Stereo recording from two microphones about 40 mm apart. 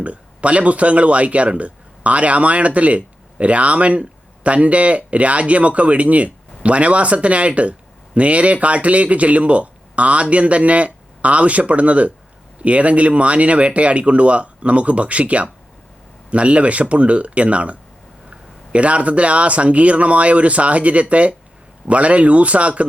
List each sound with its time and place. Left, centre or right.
0.0 s speech: right